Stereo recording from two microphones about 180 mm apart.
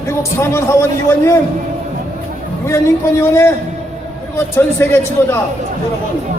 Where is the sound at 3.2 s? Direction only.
15° left (ahead or behind).